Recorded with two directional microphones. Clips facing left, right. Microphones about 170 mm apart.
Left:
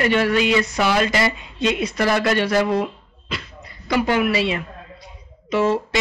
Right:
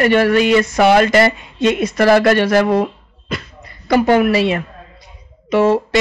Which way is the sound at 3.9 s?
50° right (ahead or behind).